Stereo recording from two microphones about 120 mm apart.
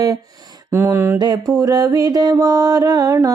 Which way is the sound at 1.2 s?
35° right (ahead or behind).